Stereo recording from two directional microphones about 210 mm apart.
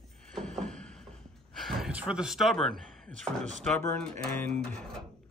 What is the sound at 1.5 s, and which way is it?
Speech, centre (ahead or behind).